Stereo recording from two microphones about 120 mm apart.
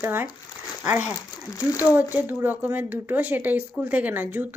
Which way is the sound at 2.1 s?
15° right (ahead or behind).